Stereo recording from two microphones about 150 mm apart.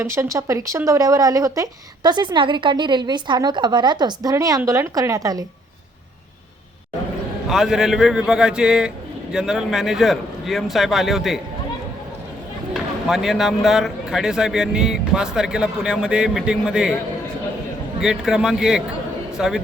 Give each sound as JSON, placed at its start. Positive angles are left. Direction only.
{"t": 0.0, "sound": "speech", "side_deg": -20}
{"t": 7.5, "sound": "a man's voice", "side_deg": 0}
{"t": 12.7, "sound": "a man's voice", "side_deg": 0}
{"t": 18.0, "sound": "a man's voice", "side_deg": -5}